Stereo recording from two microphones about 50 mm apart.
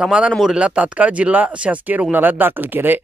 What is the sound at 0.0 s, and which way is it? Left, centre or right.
Speech, centre.